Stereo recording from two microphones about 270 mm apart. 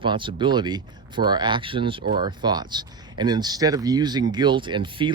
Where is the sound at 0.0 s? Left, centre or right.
Centre.